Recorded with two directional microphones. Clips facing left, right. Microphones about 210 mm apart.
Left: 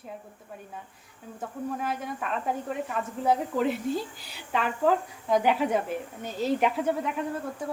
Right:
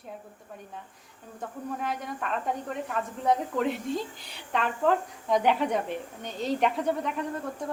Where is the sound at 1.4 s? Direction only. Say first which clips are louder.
Left 2 dB; centre (ahead or behind).